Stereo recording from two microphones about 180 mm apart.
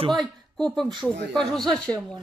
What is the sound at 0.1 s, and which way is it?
Speech, centre (ahead or behind).